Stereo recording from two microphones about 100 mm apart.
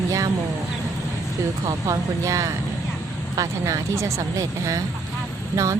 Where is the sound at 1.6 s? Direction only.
30° right (ahead or behind).